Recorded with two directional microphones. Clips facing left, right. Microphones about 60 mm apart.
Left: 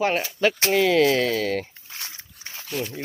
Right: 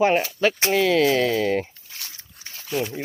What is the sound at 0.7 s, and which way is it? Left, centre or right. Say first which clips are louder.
Speech: even; centre.